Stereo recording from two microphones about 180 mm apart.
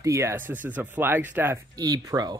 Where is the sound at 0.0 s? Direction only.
15° right (ahead or behind).